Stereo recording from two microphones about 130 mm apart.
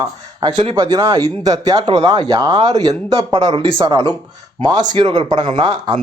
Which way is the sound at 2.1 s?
35° right (ahead or behind).